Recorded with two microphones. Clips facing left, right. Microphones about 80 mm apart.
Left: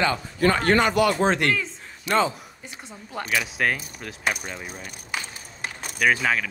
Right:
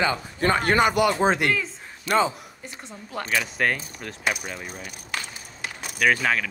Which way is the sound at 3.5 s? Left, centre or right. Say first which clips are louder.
Even; centre.